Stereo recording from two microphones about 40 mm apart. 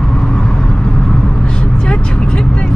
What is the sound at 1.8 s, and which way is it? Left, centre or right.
Vehicle, left.